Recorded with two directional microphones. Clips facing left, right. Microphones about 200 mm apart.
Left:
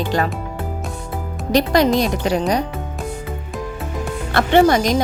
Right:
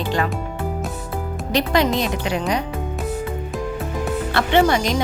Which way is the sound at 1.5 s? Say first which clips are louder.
Left 4 dB; 40° left (ahead or behind).